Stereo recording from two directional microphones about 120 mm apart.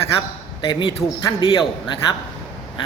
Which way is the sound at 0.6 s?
45° left (ahead or behind).